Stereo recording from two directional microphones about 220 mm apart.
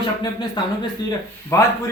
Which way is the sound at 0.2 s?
20° left (ahead or behind).